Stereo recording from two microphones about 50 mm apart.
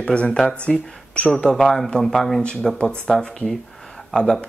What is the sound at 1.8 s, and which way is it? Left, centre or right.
Speech, centre.